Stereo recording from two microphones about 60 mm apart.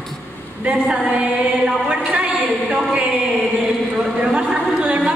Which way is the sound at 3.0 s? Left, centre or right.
Centre.